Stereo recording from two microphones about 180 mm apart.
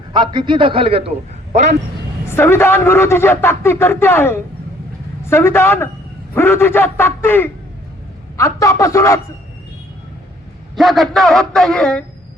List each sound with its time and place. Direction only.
0.1 s a man's voice: 25° right (ahead or behind)
2.3 s a man's voice: 15° left (ahead or behind)
10.8 s a man's voice: centre (ahead or behind)